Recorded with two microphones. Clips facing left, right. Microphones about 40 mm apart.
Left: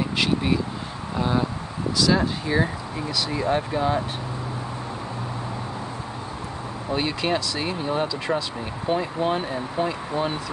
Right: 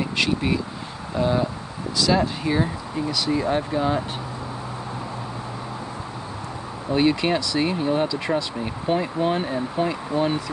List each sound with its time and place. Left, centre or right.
0.0 s speech: centre
6.9 s speech: centre